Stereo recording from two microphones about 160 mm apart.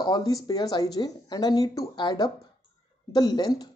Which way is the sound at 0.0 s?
25° left (ahead or behind).